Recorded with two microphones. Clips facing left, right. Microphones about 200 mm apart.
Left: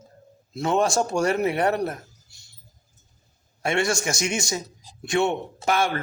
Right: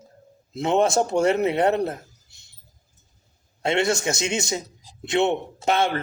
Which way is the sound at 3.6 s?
20° right (ahead or behind).